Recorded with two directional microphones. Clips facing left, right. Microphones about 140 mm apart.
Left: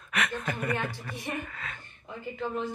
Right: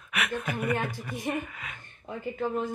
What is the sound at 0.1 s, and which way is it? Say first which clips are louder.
Speech: even; 10° right (ahead or behind).